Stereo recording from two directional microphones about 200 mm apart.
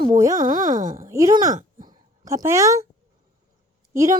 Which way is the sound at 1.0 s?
15° right (ahead or behind).